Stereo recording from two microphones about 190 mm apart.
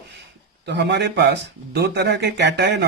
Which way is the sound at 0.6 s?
65° right (ahead or behind).